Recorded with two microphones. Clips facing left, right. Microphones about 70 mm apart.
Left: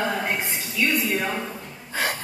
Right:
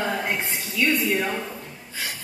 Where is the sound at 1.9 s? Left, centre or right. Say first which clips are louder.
Left 8 dB; left.